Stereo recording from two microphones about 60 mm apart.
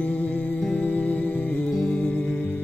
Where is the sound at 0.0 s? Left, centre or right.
Left.